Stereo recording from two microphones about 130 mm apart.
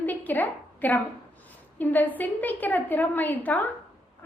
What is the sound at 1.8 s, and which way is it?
A woman's voice, 15° left (ahead or behind).